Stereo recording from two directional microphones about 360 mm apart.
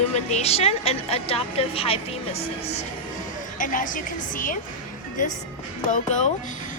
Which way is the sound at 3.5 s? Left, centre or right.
Left.